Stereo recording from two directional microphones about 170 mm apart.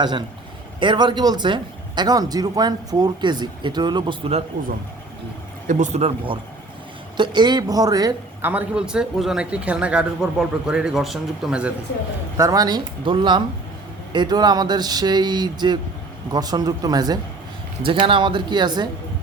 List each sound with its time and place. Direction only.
0.0 s speech: 25° right (ahead or behind)
5.6 s speech: 45° right (ahead or behind); by 8.4 s 20° right (ahead or behind)
8.4 s speech: 10° right (ahead or behind)
12.4 s speech: 20° right (ahead or behind)